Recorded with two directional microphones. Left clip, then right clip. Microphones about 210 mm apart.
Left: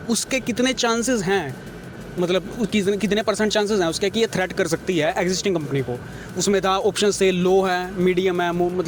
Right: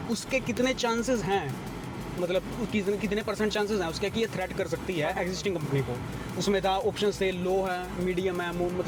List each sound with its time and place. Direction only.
0.1 s speech: 50° left (ahead or behind)